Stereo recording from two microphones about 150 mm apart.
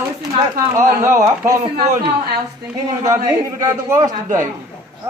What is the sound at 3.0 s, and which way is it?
A man's voice, 20° right (ahead or behind).